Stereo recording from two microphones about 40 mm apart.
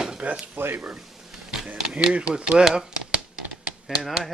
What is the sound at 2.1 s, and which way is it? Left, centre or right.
Speech, right.